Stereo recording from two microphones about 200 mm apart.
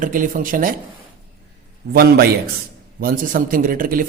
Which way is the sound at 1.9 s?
50° right (ahead or behind).